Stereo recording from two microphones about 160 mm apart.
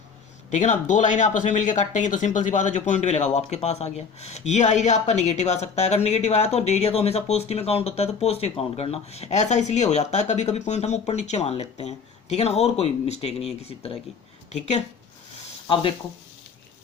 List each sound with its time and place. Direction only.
0.5 s speech: 50° left (ahead or behind)
15.6 s speech: 30° left (ahead or behind)